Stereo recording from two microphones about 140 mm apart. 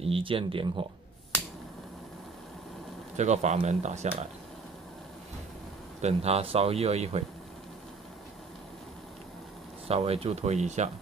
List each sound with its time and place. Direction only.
0.0 s speech: 40° right (ahead or behind)
3.2 s speech: 55° right (ahead or behind)
5.9 s speech: 50° right (ahead or behind)
9.8 s speech: 45° right (ahead or behind)